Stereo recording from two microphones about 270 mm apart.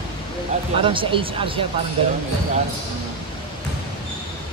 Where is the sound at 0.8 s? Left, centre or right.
Centre.